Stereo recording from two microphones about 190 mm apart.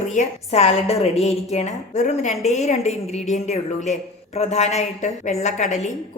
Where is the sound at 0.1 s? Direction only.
35° left (ahead or behind).